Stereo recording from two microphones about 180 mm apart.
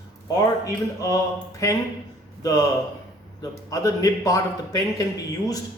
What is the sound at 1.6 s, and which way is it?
Speech, 15° left (ahead or behind).